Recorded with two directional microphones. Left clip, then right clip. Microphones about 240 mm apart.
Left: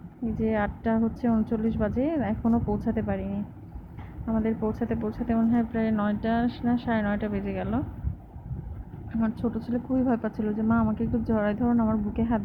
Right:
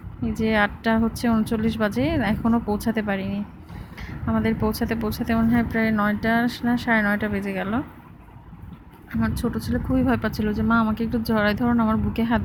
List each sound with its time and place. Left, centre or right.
0.3 s speech: right
9.2 s speech: right